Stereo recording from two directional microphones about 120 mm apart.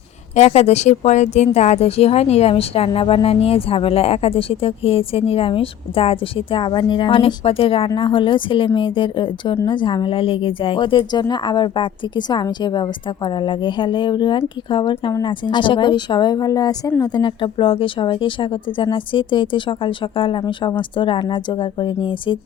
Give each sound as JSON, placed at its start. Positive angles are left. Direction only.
{"t": 0.3, "sound": "speech", "side_deg": 65}